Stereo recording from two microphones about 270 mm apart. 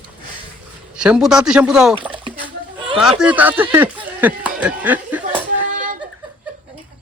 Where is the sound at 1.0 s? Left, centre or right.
Centre.